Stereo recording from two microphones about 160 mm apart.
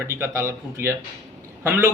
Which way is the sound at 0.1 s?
15° right (ahead or behind).